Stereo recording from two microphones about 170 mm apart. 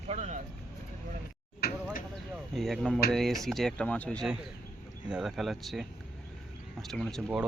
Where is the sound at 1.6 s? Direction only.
65° left (ahead or behind).